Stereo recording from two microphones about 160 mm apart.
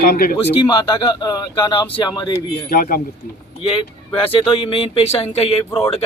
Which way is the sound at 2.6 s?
60° left (ahead or behind).